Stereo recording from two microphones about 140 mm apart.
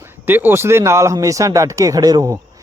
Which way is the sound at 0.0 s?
15° right (ahead or behind).